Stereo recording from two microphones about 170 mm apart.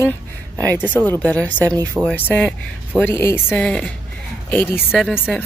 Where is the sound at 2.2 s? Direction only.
10° left (ahead or behind).